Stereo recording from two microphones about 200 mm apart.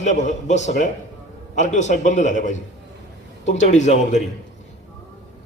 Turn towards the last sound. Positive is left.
turn(degrees=35)  # may be behind; listen again after turning